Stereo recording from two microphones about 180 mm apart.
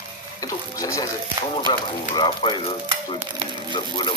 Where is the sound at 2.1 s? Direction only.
25° left (ahead or behind).